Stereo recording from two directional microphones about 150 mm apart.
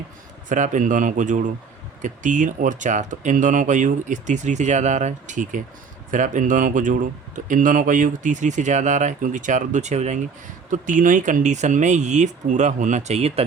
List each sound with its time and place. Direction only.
0.4 s speech: 55° right (ahead or behind)
10.7 s speech: 60° right (ahead or behind); by 13.4 s 45° right (ahead or behind)